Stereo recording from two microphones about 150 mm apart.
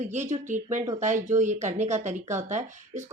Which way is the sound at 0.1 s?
55° right (ahead or behind).